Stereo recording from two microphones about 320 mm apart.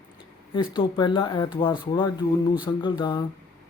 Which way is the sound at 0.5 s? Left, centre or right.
Centre.